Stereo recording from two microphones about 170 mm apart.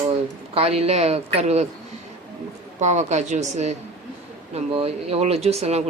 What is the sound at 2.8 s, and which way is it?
Speech, 45° right (ahead or behind).